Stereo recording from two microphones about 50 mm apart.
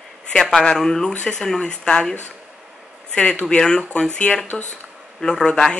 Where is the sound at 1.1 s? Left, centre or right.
Left.